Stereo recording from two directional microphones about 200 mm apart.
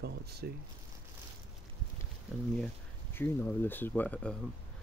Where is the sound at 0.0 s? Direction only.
55° right (ahead or behind).